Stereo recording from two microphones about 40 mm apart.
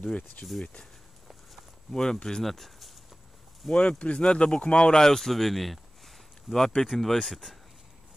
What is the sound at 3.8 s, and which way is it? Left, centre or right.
Speech, left.